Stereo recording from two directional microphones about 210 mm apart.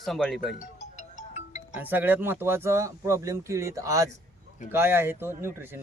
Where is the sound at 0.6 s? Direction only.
35° left (ahead or behind).